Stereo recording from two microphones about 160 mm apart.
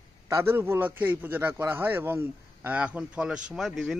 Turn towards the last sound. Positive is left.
turn(degrees=0)  # may be behind; listen again after turning